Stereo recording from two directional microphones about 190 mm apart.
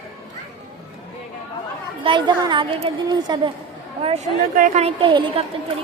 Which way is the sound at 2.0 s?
25° right (ahead or behind).